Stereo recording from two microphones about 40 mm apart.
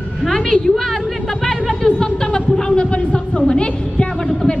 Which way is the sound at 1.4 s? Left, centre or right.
Centre.